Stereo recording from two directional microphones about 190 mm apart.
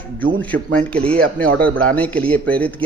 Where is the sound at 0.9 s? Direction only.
5° left (ahead or behind).